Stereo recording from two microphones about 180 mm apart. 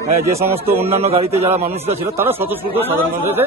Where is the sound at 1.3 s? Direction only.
15° right (ahead or behind).